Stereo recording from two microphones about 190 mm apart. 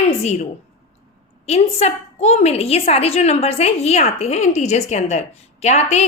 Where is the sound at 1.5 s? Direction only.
35° left (ahead or behind).